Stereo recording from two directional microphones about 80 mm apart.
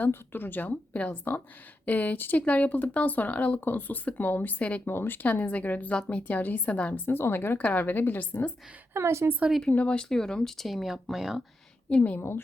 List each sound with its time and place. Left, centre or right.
0.0 s speech: left
8.9 s a woman's voice: right
9.6 s speech: centre
11.9 s speech: centre